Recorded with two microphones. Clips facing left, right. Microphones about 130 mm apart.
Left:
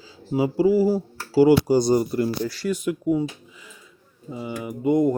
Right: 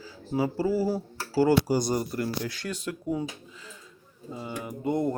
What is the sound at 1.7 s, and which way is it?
Speech, 30° left (ahead or behind).